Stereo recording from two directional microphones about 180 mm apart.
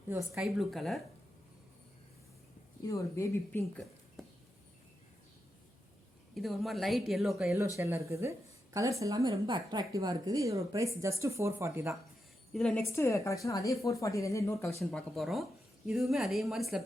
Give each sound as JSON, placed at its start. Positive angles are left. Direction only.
{"t": 0.3, "sound": "a woman's voice", "side_deg": 0}
{"t": 2.8, "sound": "a woman's voice", "side_deg": 15}
{"t": 6.3, "sound": "a woman's voice", "side_deg": 0}
{"t": 7.8, "sound": "a woman's voice", "side_deg": -15}
{"t": 12.5, "sound": "a woman's voice", "side_deg": 5}
{"t": 12.8, "sound": "a woman's voice", "side_deg": 15}
{"t": 14.8, "sound": "a woman's voice", "side_deg": 0}